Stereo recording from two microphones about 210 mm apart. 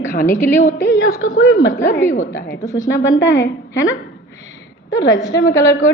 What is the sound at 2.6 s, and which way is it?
Speech, 15° left (ahead or behind).